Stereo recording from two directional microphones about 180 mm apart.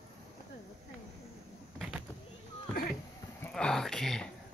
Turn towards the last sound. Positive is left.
turn(degrees=5)  # may be behind; listen again after turning